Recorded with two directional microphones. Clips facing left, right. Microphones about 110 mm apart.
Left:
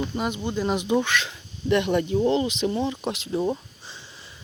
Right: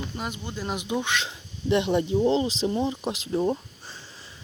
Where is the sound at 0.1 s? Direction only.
5° left (ahead or behind).